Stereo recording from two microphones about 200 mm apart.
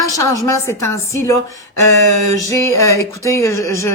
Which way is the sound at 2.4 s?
15° left (ahead or behind).